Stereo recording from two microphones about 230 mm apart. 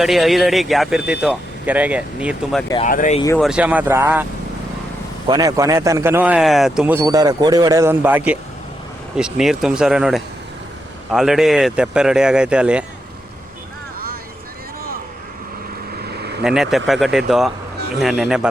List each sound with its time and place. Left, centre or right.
0.0 s speech: centre
2.8 s speech: left
3.3 s speech: centre
5.3 s speech: centre
16.0 s vehicle: right
16.4 s speech: centre